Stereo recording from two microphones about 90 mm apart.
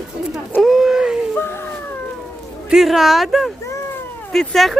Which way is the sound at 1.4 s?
25° left (ahead or behind).